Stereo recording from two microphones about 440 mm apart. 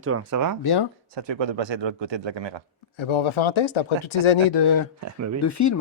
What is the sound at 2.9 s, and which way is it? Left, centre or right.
Speech, left.